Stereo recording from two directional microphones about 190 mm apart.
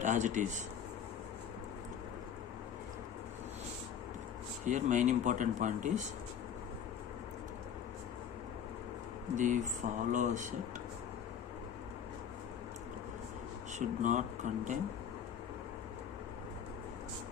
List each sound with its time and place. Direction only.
0.0 s speech: 40° right (ahead or behind)
4.6 s speech: 40° right (ahead or behind)
9.3 s speech: 40° right (ahead or behind)
13.7 s speech: 40° right (ahead or behind)